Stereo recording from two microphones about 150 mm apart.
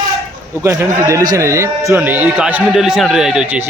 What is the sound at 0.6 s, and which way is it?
Speech, 20° right (ahead or behind).